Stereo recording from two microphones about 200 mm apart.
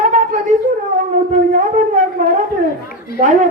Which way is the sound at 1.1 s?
40° right (ahead or behind).